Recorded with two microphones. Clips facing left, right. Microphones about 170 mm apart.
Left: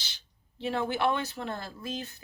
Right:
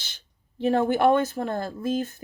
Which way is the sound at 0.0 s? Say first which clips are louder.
Right 1 dB; 50° right (ahead or behind).